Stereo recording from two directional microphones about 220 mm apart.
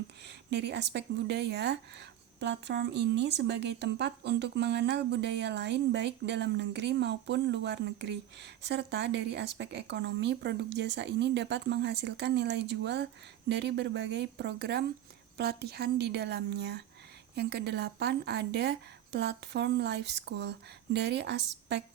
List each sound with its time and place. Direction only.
0.3 s speech: 50° right (ahead or behind)